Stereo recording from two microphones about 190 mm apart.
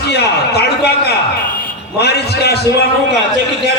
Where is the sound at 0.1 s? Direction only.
60° left (ahead or behind).